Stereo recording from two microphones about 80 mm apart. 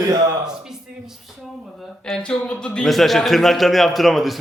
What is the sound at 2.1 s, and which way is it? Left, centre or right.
A man's voice, centre.